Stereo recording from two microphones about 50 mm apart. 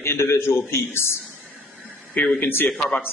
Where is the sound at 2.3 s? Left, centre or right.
Left.